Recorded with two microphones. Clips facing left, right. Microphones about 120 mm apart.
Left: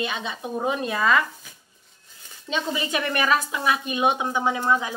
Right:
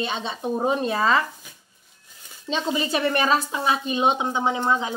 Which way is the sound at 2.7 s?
30° right (ahead or behind).